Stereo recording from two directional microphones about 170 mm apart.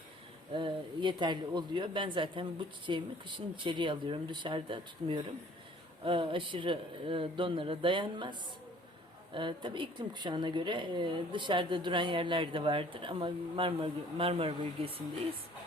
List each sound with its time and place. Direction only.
0.5 s speech: 30° right (ahead or behind)